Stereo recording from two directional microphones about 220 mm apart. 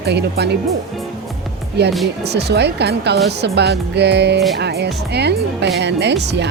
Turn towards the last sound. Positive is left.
turn(degrees=-50)  # may be behind; listen again after turning